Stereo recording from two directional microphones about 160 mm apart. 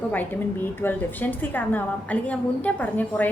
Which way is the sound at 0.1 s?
10° left (ahead or behind).